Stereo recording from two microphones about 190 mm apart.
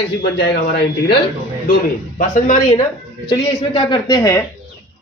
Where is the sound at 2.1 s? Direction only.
40° left (ahead or behind).